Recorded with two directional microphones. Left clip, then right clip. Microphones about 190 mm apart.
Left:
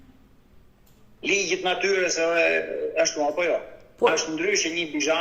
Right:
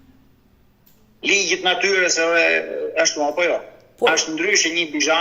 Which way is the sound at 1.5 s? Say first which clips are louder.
Right 5 dB; 35° right (ahead or behind).